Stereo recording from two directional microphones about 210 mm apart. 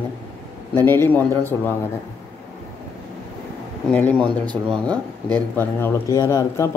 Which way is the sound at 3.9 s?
10° left (ahead or behind).